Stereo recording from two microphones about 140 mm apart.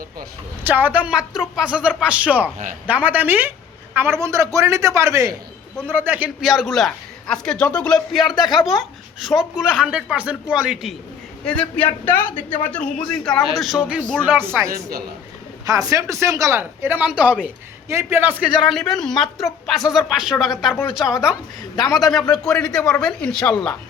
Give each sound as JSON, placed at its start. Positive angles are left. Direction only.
{"t": 0.6, "sound": "a man's voice", "side_deg": -15}
{"t": 11.4, "sound": "a man's voice", "side_deg": 5}